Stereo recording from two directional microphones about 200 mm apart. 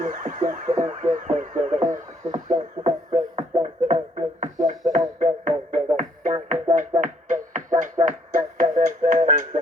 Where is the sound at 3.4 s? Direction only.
30° right (ahead or behind).